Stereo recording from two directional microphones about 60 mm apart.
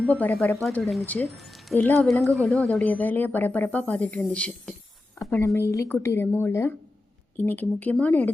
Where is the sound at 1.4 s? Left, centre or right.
Centre.